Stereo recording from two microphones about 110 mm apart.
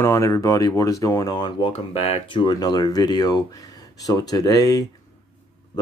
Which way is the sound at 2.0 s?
55° left (ahead or behind).